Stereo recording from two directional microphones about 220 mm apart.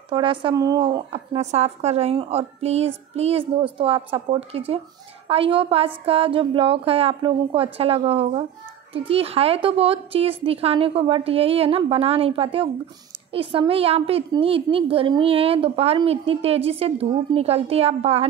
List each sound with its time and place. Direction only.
0.1 s a woman's voice: 20° right (ahead or behind)